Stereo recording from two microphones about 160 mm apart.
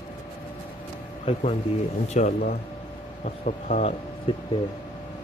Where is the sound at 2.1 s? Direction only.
50° left (ahead or behind).